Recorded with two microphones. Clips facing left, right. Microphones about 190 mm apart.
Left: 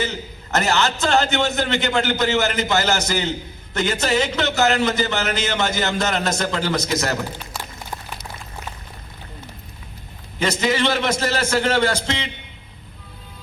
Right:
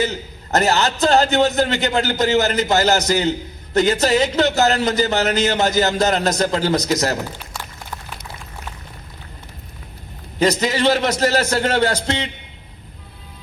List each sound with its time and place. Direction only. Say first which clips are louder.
0.0 s a man's voice: right 4 dB; 35° right (ahead or behind)
10.4 s a man's voice: right 3 dB; 35° right (ahead or behind)